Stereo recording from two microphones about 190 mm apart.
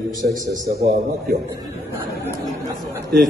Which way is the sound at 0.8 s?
55° right (ahead or behind).